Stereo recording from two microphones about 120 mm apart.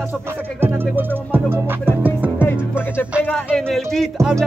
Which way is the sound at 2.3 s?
15° left (ahead or behind).